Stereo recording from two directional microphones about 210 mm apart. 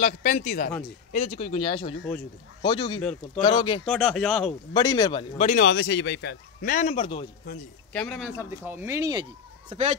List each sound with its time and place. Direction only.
0.0 s speech: 35° left (ahead or behind)
3.8 s speech: centre (ahead or behind)
4.7 s speech: 20° left (ahead or behind)
5.4 s a man's voice: 40° left (ahead or behind)
7.9 s speech: 5° left (ahead or behind)
8.4 s speech: 10° right (ahead or behind)
9.7 s speech: 30° right (ahead or behind)